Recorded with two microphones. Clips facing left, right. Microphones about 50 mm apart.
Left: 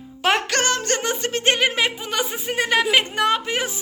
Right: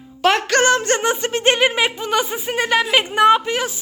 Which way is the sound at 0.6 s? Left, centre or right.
Centre.